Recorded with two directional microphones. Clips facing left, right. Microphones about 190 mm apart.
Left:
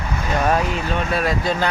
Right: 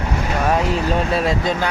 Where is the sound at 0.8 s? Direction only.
30° right (ahead or behind).